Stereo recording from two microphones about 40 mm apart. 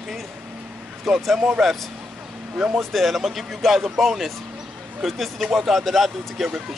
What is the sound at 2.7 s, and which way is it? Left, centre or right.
Speech, centre.